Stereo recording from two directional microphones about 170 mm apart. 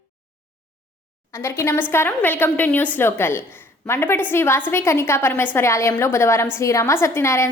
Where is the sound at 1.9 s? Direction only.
10° left (ahead or behind).